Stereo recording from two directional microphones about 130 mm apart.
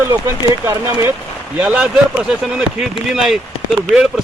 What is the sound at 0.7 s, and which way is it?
Speech, 20° right (ahead or behind).